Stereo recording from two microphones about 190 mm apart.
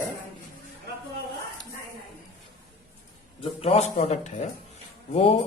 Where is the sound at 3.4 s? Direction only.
30° left (ahead or behind).